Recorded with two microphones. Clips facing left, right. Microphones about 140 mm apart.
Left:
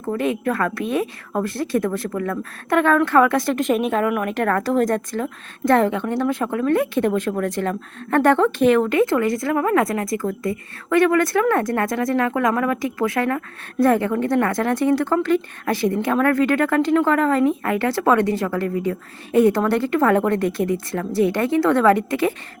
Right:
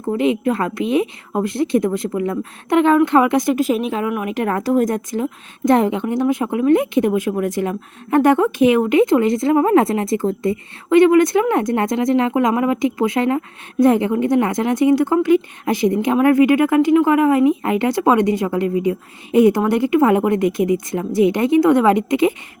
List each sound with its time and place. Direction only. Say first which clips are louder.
0.0 s a woman's voice: right 4 dB; 20° right (ahead or behind)